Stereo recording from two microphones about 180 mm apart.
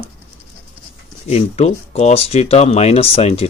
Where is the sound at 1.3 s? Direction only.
35° left (ahead or behind).